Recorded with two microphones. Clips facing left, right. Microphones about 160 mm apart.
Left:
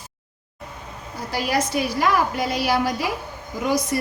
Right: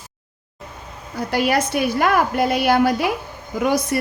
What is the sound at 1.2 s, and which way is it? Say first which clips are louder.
A woman's voice: right 4 dB; 60° right (ahead or behind).